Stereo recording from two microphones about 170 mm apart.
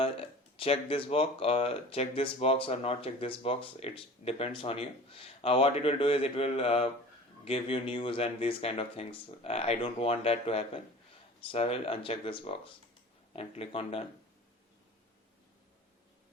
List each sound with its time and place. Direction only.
0.0 s speech: 35° left (ahead or behind)